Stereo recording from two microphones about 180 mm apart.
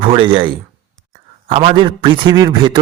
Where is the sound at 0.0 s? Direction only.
30° right (ahead or behind).